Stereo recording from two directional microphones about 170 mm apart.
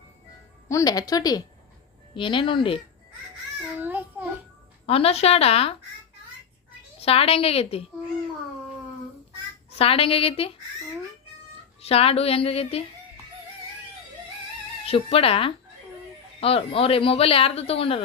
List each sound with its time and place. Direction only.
0.7 s speech: 20° left (ahead or behind)
3.8 s child singing: 10° right (ahead or behind)
4.9 s speech: 35° left (ahead or behind)
7.0 s speech: 35° left (ahead or behind)
9.6 s speech: 35° left (ahead or behind)
11.8 s speech: 35° left (ahead or behind)
14.8 s speech: 35° left (ahead or behind)